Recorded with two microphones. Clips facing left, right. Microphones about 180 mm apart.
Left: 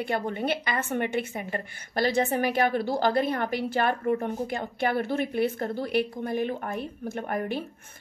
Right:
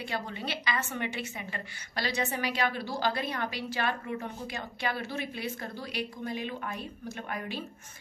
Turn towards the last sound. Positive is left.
turn(degrees=55)  # may be behind; listen again after turning